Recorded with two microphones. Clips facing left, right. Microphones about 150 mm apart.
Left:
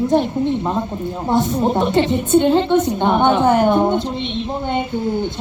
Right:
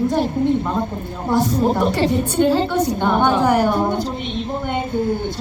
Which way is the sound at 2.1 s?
20° left (ahead or behind).